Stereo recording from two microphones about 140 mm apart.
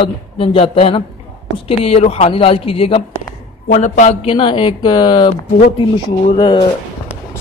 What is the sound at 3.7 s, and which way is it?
Speech, 65° left (ahead or behind).